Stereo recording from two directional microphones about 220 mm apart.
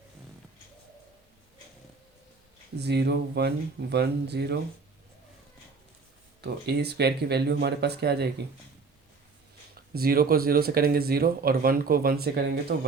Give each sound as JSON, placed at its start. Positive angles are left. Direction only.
{"t": 2.7, "sound": "speech", "side_deg": -50}
{"t": 6.4, "sound": "speech", "side_deg": -50}
{"t": 9.7, "sound": "speech", "side_deg": -45}